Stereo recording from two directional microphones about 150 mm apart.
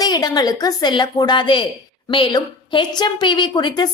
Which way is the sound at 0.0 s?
25° left (ahead or behind).